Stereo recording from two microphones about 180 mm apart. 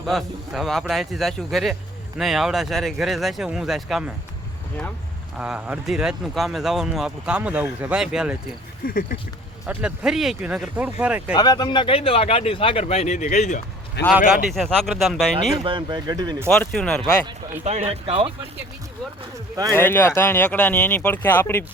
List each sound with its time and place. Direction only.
0.0 s speech: centre (ahead or behind)
5.4 s speech: 5° right (ahead or behind)
8.9 s speech: 55° left (ahead or behind)
9.6 s speech: 5° right (ahead or behind)
11.3 s speech: 25° left (ahead or behind); by 13.6 s 40° left (ahead or behind)
14.0 s a man's voice: 70° left (ahead or behind)
14.5 s speech: centre (ahead or behind)
15.4 s speech: 25° right (ahead or behind)
16.5 s speech: 5° left (ahead or behind)
17.6 s speech: 35° right (ahead or behind)
19.7 s speech: 10° left (ahead or behind)